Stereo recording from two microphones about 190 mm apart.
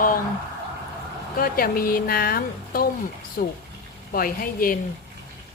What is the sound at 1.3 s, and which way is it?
Speech, 50° left (ahead or behind).